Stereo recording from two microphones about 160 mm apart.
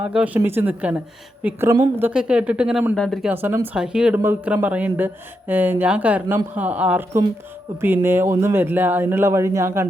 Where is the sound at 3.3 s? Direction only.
10° right (ahead or behind).